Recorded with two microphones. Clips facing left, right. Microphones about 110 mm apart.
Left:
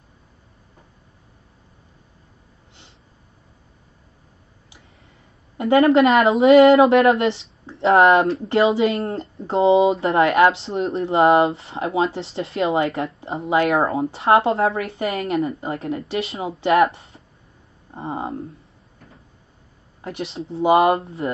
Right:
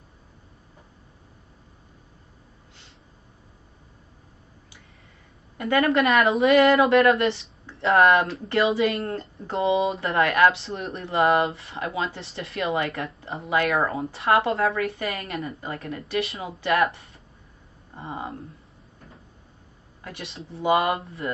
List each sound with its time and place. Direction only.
5.6 s speech: 25° left (ahead or behind)
20.0 s speech: 25° left (ahead or behind)